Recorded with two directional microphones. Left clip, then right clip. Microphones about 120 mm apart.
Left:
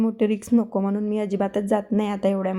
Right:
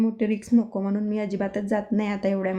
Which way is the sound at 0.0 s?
60° left (ahead or behind).